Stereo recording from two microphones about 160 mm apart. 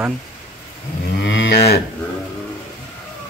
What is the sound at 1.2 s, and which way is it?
Moo, 85° left.